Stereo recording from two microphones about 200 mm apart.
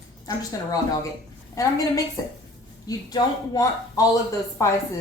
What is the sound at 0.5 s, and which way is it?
A woman's voice, 20° left (ahead or behind).